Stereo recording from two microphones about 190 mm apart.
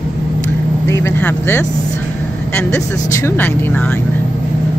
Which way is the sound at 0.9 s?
15° left (ahead or behind).